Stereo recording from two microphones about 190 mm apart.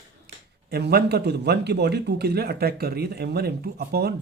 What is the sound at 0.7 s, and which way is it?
A man's voice, 55° right (ahead or behind).